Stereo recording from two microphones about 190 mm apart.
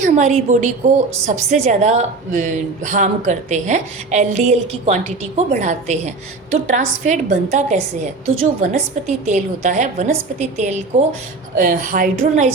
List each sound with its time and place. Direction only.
0.0 s a woman's voice: 40° right (ahead or behind)